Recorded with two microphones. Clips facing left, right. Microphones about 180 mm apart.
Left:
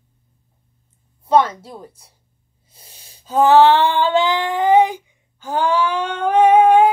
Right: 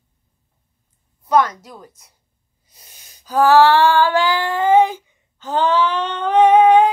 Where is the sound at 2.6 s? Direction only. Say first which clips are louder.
Left 2 dB; 30° left (ahead or behind).